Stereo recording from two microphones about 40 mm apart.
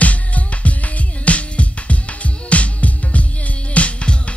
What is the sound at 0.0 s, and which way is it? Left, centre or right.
Music, left.